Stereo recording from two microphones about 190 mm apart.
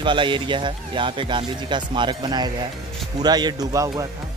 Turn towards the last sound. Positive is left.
turn(degrees=-20)  # may be behind; listen again after turning